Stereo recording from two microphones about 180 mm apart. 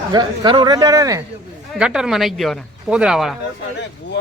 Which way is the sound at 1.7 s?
5° right (ahead or behind).